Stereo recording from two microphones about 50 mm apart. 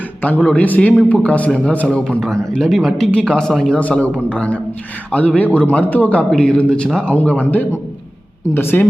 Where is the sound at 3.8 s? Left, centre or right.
Left.